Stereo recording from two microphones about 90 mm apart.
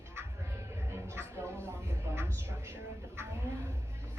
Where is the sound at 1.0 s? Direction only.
30° right (ahead or behind).